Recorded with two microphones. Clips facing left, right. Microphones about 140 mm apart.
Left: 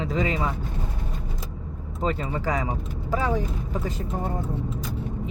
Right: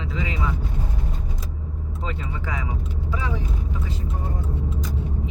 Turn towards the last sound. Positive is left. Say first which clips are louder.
# left 4 dB
turn(degrees=45)  # may be behind; listen again after turning